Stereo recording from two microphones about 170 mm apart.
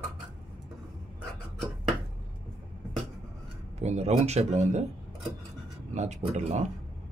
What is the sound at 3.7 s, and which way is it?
A man's voice, 40° right (ahead or behind).